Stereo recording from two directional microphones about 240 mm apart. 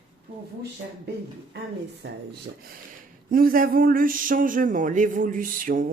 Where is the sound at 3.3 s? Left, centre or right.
Right.